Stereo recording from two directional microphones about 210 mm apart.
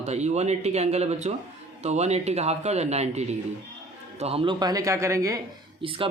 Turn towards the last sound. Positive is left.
turn(degrees=-25)  # may be behind; listen again after turning